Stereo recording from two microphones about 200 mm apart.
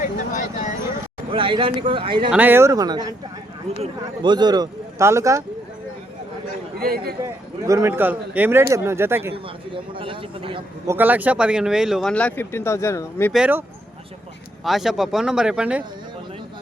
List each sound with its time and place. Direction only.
0.0 s a sound: 40° left (ahead or behind)
1.3 s speech: 25° right (ahead or behind)
2.3 s speech: 10° right (ahead or behind)
4.2 s speech: 20° right (ahead or behind)
6.7 s a man's voice: 50° right (ahead or behind)
7.6 s speech: 15° right (ahead or behind)
9.3 s speech: 25° right (ahead or behind)
10.8 s speech: 10° right (ahead or behind); by 13.3 s 15° left (ahead or behind)
13.3 s speech: 5° right (ahead or behind)